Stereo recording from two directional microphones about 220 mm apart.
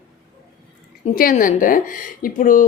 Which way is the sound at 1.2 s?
40° left (ahead or behind).